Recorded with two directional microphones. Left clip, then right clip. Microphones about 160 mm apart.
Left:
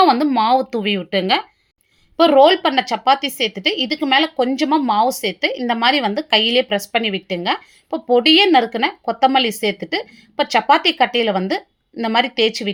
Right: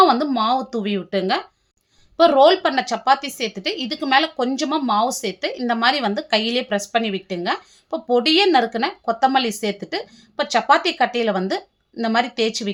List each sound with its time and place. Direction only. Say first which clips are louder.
0.0 s a woman's voice: left 2 dB; 15° left (ahead or behind)